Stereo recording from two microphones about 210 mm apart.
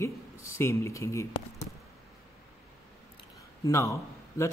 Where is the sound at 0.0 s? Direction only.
15° left (ahead or behind).